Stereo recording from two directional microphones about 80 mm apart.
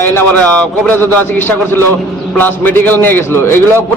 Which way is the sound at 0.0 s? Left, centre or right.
Left.